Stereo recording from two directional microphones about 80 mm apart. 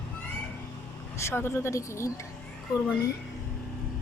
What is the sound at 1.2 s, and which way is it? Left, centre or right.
Speech, left.